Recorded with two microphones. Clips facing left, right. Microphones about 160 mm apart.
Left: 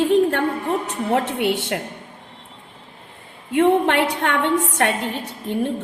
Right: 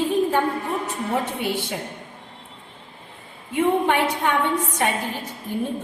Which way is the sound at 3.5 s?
70° left (ahead or behind).